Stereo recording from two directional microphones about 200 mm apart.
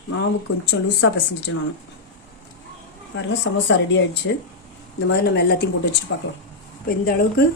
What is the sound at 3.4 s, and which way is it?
Speech, 65° left (ahead or behind).